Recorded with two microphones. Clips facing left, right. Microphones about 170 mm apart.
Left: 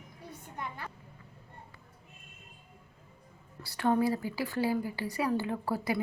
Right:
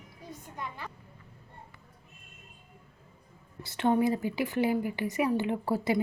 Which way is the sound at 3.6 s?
20° right (ahead or behind).